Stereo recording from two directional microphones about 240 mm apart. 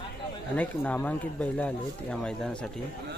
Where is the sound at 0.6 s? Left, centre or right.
Centre.